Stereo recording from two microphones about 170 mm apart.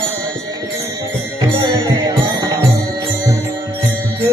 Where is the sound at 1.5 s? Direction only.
25° right (ahead or behind).